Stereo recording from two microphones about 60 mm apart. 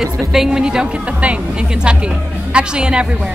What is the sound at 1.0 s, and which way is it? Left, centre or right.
A woman's voice, right.